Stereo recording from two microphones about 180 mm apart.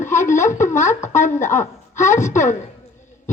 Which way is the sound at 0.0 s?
40° left (ahead or behind).